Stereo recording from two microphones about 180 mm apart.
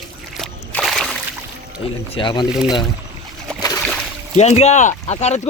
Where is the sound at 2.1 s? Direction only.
25° left (ahead or behind).